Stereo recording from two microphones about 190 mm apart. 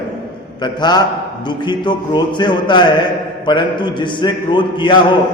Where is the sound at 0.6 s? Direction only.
20° left (ahead or behind).